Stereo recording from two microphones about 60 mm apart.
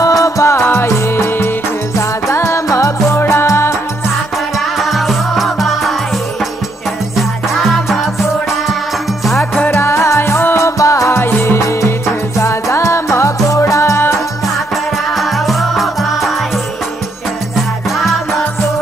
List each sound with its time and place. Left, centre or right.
0.0 s music: left
3.2 s music: left
4.7 s music: centre
7.6 s music: centre
9.7 s music: left
10.6 s music: left
15.1 s music: centre